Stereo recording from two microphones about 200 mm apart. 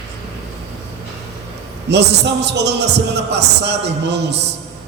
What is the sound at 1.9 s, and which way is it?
A man's voice, 60° right (ahead or behind).